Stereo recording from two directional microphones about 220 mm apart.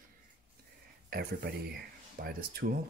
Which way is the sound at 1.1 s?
45° right (ahead or behind).